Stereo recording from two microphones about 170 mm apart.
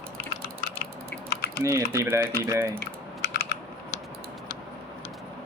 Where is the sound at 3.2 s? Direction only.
75° left (ahead or behind).